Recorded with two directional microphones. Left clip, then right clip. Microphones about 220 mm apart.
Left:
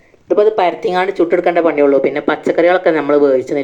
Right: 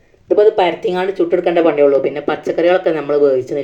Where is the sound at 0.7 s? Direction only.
10° left (ahead or behind).